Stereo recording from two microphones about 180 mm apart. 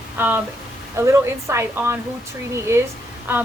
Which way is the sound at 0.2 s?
10° right (ahead or behind).